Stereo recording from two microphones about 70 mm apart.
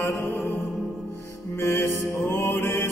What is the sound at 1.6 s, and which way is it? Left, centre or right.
Mantra, left.